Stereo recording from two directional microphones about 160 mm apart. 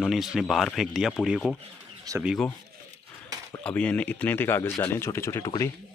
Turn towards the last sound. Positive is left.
turn(degrees=20)  # may be behind; listen again after turning